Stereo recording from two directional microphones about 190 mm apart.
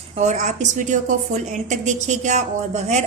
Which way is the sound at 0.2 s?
35° right (ahead or behind).